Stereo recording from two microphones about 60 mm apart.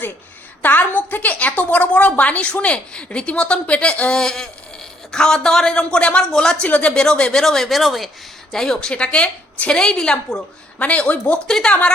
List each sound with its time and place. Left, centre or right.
0.6 s a woman's voice: left
4.2 s a woman's voice: centre
8.5 s a woman's voice: centre
10.8 s a woman's voice: left
11.4 s a woman's voice: centre